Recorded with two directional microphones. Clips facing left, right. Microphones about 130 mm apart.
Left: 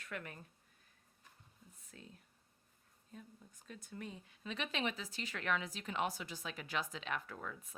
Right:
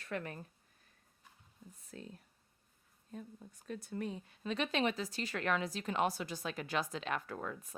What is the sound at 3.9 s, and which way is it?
Speech, 45° right (ahead or behind).